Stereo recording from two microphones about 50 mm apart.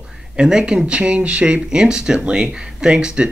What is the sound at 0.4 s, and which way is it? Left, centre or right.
Speech, centre.